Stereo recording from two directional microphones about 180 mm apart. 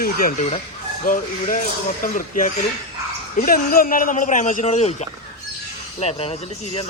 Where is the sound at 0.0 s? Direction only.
50° left (ahead or behind).